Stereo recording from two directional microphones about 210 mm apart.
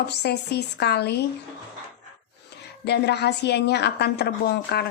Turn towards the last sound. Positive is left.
turn(degrees=50)  # may be behind; listen again after turning